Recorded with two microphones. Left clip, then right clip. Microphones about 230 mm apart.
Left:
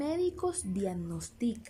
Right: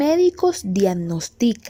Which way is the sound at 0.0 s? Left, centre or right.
Right.